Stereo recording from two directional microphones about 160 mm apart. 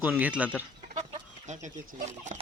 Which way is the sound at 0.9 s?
45° right (ahead or behind).